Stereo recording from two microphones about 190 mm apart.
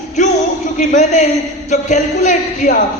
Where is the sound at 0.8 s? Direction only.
40° left (ahead or behind).